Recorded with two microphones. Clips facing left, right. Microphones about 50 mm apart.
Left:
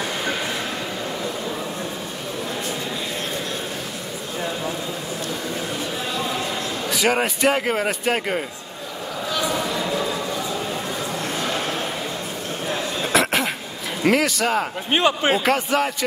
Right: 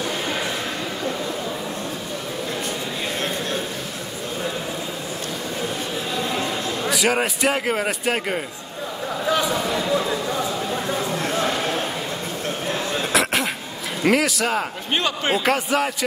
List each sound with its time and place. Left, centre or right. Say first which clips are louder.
6.9 s speech: left 1 dB; centre
13.0 s cough: left 2 dB; centre
14.0 s speech: even; centre
14.9 s speech: left 4 dB; centre
15.4 s speech: even; centre